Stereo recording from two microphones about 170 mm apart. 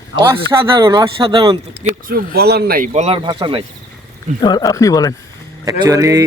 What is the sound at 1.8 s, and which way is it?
Speech, 55° right (ahead or behind).